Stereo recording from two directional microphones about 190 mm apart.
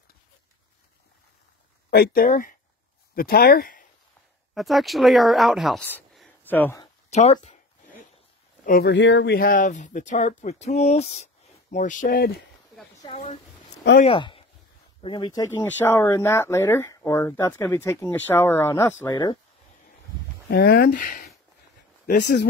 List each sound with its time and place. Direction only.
1.9 s speech: 55° left (ahead or behind)
4.6 s speech: centre (ahead or behind)
5.9 s a sound: 5° left (ahead or behind)
7.1 s speech: 35° left (ahead or behind)
8.6 s speech: 55° left (ahead or behind)
13.0 s speech: 35° left (ahead or behind)
20.4 s speech: 55° left (ahead or behind)
22.0 s speech: 60° left (ahead or behind)